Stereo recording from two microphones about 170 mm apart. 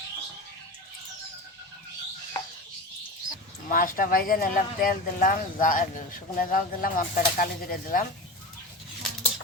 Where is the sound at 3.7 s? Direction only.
55° left (ahead or behind).